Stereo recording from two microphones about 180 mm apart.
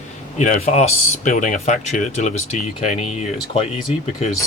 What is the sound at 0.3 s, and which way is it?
Speech, 40° left (ahead or behind).